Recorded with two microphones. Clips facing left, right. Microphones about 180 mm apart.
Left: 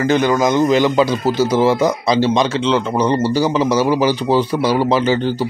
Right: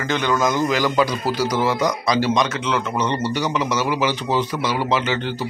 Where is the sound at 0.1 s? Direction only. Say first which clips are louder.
Left 4 dB; 40° left (ahead or behind).